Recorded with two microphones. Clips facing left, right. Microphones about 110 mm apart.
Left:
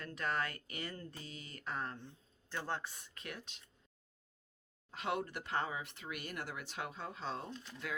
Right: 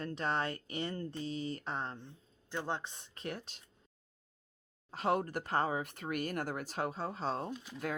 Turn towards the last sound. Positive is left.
turn(degrees=-10)  # may be behind; listen again after turning